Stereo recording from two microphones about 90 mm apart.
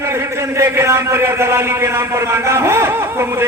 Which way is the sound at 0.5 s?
30° right (ahead or behind).